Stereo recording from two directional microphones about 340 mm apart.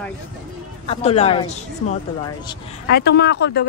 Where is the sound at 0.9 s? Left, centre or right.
Centre.